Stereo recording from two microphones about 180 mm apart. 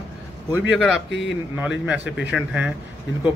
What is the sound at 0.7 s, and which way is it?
Speech, centre (ahead or behind).